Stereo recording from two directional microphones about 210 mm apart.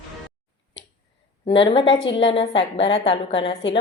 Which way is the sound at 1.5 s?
25° left (ahead or behind).